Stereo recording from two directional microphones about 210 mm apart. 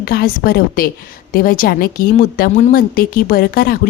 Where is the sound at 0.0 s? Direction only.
45° left (ahead or behind).